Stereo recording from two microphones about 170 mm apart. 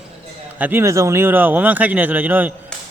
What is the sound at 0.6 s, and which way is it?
Speech, 15° right (ahead or behind).